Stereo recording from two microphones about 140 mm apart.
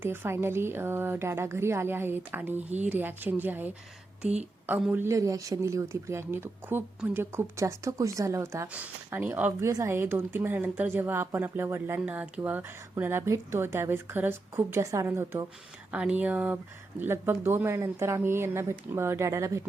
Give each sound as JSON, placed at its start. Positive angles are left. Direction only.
{"t": 0.0, "sound": "a woman's voice", "side_deg": -15}
{"t": 4.9, "sound": "a woman's voice", "side_deg": -15}